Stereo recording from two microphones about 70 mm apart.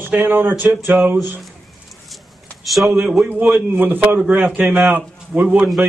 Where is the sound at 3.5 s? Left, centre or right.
Right.